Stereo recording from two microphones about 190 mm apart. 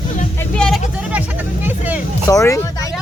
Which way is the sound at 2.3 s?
15° left (ahead or behind).